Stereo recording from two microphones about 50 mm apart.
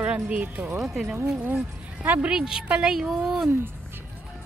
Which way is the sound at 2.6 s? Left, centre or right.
Right.